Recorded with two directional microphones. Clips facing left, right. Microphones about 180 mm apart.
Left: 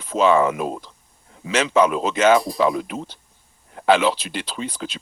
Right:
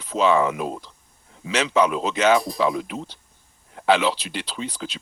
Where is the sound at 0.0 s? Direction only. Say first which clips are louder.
Left 2 dB; 50° left (ahead or behind).